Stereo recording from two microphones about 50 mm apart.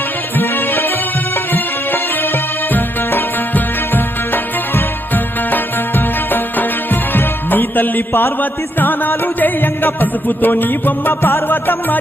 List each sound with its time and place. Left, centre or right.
0.3 s music: left
7.1 s music: left